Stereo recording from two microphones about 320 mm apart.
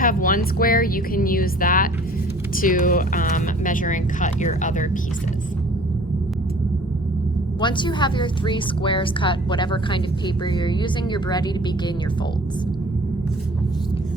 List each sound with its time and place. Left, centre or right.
0.0 s speech: left
7.6 s a woman's voice: centre